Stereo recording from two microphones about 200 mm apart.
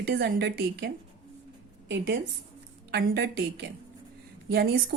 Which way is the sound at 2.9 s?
55° right (ahead or behind).